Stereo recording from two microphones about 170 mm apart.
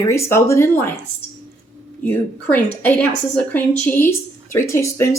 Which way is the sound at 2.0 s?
10° left (ahead or behind).